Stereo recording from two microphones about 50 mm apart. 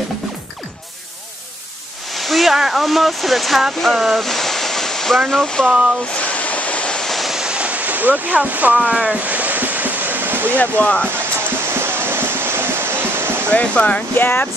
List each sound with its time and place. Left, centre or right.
2.1 s speech: centre
6.1 s a sound: left
7.0 s waves: centre
7.3 s a sound: centre; by 10.6 s right
10.6 s speech: left
11.6 s music: right
13.5 s speech: left
14.1 s speech: left